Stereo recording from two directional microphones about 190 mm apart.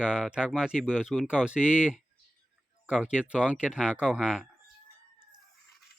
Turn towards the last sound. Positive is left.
turn(degrees=-5)  # may be behind; listen again after turning